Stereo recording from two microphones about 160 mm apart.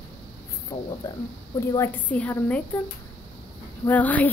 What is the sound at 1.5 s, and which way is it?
A woman's voice, 15° left (ahead or behind).